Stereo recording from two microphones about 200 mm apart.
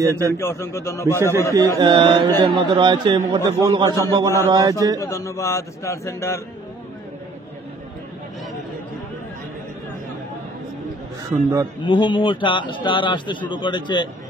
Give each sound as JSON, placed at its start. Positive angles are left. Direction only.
{"t": 0.0, "sound": "a man's voice", "side_deg": -15}
{"t": 0.3, "sound": "a man's voice", "side_deg": 15}
{"t": 1.5, "sound": "speech", "side_deg": -20}
{"t": 5.0, "sound": "a man's voice", "side_deg": 15}
{"t": 11.8, "sound": "a man's voice", "side_deg": 25}